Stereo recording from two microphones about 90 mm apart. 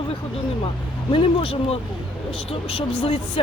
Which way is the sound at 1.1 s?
85° left.